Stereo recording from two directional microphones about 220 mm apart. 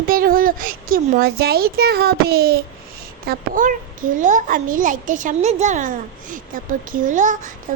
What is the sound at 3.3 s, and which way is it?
A child's voice, 35° right (ahead or behind).